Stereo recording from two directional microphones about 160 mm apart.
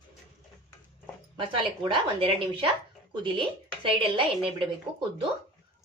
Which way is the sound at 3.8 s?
35° right (ahead or behind).